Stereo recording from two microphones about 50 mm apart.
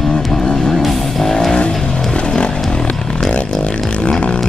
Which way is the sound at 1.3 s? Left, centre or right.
Centre.